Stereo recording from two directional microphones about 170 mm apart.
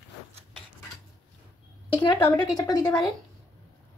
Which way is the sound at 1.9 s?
20° left (ahead or behind).